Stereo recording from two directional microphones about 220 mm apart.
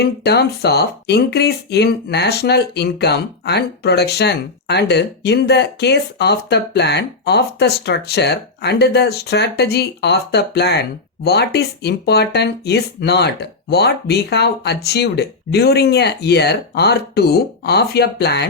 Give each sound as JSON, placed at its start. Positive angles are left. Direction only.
{"t": 0.0, "sound": "speech", "side_deg": 50}